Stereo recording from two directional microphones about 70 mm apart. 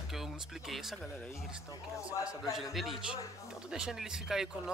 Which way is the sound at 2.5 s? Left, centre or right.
Centre.